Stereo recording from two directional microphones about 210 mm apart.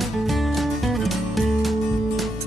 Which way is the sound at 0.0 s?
Centre (ahead or behind).